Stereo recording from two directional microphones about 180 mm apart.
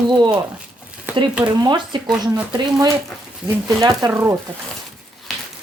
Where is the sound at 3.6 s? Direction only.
20° right (ahead or behind).